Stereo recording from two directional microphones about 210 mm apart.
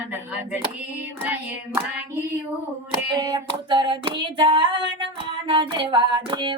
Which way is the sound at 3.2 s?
20° right (ahead or behind).